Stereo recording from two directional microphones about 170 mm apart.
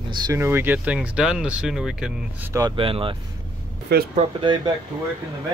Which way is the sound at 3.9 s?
75° right (ahead or behind).